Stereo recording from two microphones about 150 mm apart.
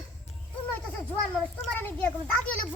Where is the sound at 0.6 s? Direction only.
15° left (ahead or behind).